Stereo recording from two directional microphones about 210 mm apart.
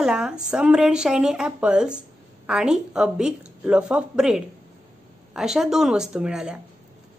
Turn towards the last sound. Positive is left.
turn(degrees=-5)  # may be behind; listen again after turning